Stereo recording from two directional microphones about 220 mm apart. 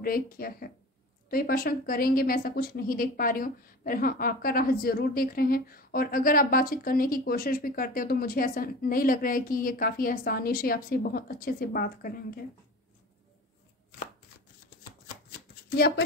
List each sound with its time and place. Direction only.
0.0 s a woman's voice: 40° left (ahead or behind)